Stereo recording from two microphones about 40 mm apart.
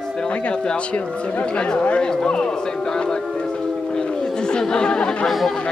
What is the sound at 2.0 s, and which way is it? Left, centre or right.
Speech, left.